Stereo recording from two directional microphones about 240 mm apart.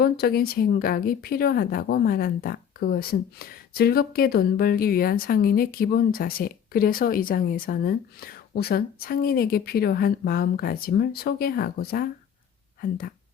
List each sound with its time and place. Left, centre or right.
0.0 s speech: left